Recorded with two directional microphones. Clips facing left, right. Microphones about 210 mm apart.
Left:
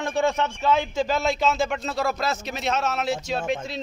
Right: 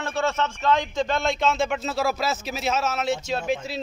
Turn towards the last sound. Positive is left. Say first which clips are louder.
# even
turn(degrees=0)  # may be behind; listen again after turning